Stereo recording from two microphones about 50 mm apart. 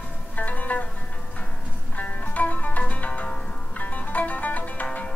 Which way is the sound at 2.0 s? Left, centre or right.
Left.